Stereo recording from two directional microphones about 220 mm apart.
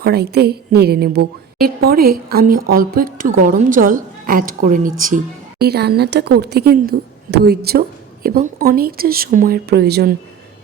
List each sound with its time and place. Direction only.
0.0 s a woman's voice: 45° right (ahead or behind)